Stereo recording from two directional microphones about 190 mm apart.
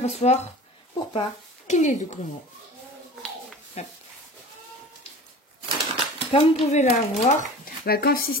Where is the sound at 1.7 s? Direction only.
40° left (ahead or behind).